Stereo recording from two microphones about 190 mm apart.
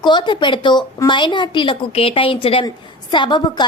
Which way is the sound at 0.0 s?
25° left (ahead or behind).